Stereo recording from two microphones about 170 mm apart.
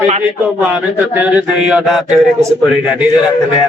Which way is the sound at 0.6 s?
10° right (ahead or behind).